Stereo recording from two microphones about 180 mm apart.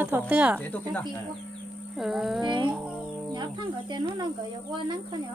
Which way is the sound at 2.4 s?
25° right (ahead or behind).